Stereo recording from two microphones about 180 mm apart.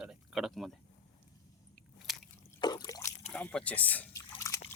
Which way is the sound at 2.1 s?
Centre (ahead or behind).